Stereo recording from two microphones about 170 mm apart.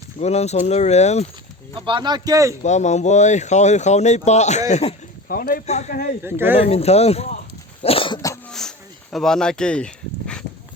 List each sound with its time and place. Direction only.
0.2 s speech: 40° left (ahead or behind)
1.8 s speech: 25° right (ahead or behind)
2.6 s speech: 45° left (ahead or behind)
5.3 s speech: 60° left (ahead or behind)
5.6 s speech: 40° left (ahead or behind)
5.9 s speech: 55° left (ahead or behind)
6.2 s speech: 15° right (ahead or behind)
6.7 s speech: 40° left (ahead or behind)
7.8 s cough: 35° left (ahead or behind)
8.4 s a sound: 5° left (ahead or behind)
9.1 s speech: 5° left (ahead or behind)